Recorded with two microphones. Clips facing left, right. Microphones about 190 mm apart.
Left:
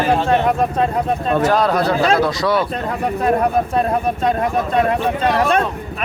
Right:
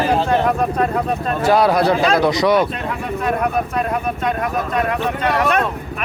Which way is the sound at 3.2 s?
30° left (ahead or behind).